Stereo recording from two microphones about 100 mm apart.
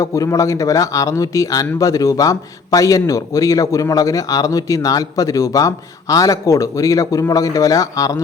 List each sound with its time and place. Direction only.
0.0 s a man's voice: 35° left (ahead or behind)